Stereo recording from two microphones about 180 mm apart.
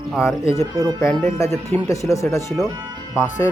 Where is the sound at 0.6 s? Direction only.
15° right (ahead or behind).